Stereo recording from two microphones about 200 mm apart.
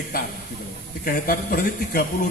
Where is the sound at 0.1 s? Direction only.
45° left (ahead or behind).